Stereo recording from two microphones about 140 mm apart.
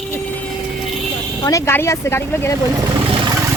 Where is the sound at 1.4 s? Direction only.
20° left (ahead or behind).